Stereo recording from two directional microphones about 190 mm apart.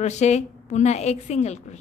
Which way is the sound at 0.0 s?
35° left (ahead or behind).